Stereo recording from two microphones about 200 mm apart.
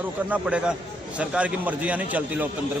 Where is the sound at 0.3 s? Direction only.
5° right (ahead or behind).